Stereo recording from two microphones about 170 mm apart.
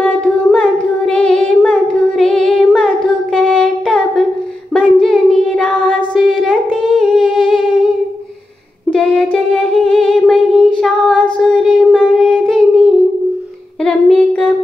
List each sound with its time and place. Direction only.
0.0 s singing: 5° left (ahead or behind)
7.0 s humming: centre (ahead or behind)
8.9 s humming: 5° left (ahead or behind)